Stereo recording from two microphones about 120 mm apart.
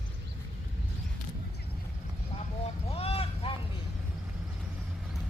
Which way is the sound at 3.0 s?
55° left (ahead or behind).